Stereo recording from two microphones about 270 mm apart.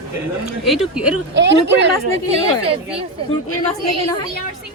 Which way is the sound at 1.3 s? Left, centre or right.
Right.